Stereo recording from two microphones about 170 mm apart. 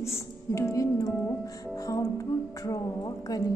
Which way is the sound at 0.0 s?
15° left (ahead or behind).